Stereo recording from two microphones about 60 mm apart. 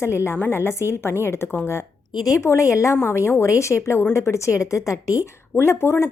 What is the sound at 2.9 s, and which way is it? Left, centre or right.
A woman's voice, left.